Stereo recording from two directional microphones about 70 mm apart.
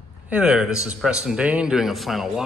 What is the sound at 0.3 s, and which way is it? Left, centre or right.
A man's voice, centre.